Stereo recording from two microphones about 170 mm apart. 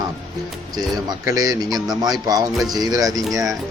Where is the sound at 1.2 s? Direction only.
20° right (ahead or behind).